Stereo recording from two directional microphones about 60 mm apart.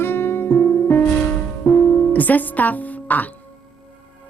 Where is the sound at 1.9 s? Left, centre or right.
Left.